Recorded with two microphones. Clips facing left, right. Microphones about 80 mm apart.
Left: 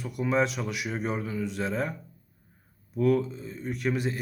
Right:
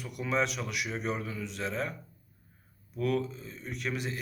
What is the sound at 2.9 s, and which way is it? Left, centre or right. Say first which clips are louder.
Speech: left 6 dB; left.